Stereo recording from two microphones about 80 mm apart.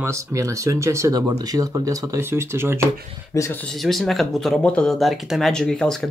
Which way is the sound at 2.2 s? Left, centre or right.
Right.